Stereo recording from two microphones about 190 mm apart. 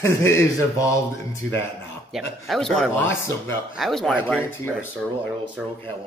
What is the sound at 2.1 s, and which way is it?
Speech, centre (ahead or behind).